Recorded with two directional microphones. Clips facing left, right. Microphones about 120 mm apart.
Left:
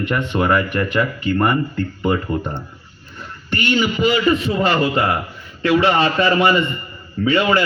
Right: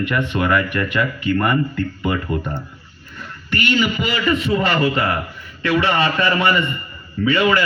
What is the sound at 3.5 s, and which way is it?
Speech, 30° left (ahead or behind).